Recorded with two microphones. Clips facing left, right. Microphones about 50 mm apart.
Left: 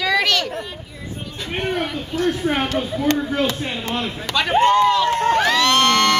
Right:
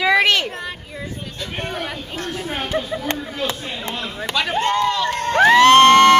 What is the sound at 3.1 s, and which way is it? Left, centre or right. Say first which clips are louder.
Speech: left 8 dB; right.